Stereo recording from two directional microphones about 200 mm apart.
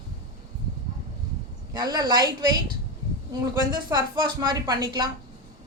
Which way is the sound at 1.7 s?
20° right (ahead or behind).